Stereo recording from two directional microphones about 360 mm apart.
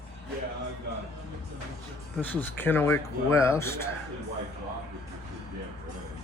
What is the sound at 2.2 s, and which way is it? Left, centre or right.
Speech, centre.